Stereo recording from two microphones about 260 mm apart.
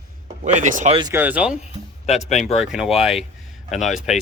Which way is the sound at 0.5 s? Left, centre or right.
Right.